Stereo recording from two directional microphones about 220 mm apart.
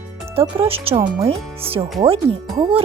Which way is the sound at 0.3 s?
25° right (ahead or behind).